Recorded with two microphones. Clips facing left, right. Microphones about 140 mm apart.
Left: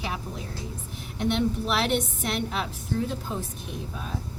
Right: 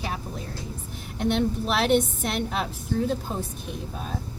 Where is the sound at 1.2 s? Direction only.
40° right (ahead or behind).